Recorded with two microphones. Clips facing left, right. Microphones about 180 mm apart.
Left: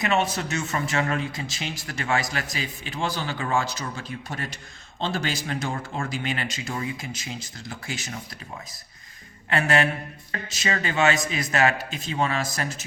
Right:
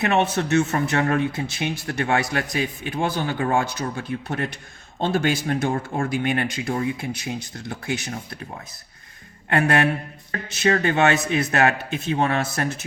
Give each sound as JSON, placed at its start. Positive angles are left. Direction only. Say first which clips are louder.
{"t": 0.0, "sound": "speech", "louder": "right 4 dB", "side_deg": -60}
{"t": 5.7, "sound": "speech", "louder": "right 6 dB", "side_deg": -35}
{"t": 6.1, "sound": "speech", "louder": "right 6 dB", "side_deg": -55}
{"t": 9.5, "sound": "speech", "louder": "right 3 dB", "side_deg": -55}